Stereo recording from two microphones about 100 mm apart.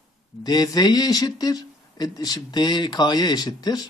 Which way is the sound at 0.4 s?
40° left (ahead or behind).